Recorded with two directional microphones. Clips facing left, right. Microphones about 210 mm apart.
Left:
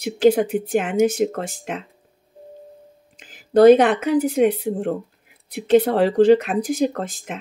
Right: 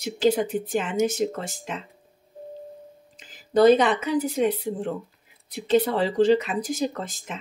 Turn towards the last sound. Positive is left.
turn(degrees=55)  # may be behind; listen again after turning